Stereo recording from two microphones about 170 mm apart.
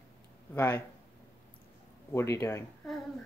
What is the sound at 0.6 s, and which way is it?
Speech, 10° left (ahead or behind).